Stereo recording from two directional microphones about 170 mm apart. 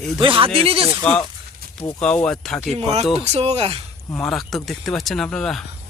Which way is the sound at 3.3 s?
40° right (ahead or behind).